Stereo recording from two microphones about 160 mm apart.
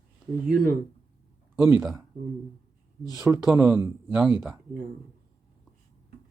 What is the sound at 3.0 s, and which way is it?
Speech, 25° left (ahead or behind).